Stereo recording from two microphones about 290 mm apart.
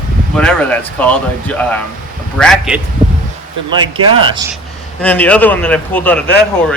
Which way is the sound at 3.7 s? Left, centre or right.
Centre.